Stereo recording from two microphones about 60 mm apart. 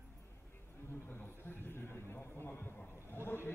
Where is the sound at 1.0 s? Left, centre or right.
Left.